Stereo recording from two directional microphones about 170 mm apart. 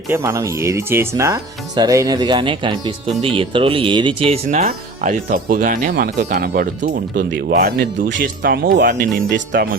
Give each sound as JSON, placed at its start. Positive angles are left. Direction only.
{"t": 0.1, "sound": "speech", "side_deg": -20}
{"t": 4.4, "sound": "speech", "side_deg": -45}